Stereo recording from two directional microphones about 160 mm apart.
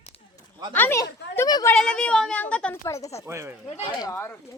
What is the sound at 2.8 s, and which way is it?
Speech, 20° left (ahead or behind).